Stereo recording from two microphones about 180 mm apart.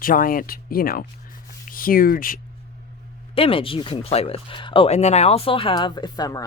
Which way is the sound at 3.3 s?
30° left (ahead or behind).